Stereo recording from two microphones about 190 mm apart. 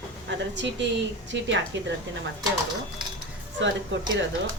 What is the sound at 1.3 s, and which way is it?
Speech, 75° right (ahead or behind).